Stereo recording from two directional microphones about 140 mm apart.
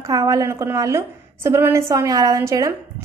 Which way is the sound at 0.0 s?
25° right (ahead or behind).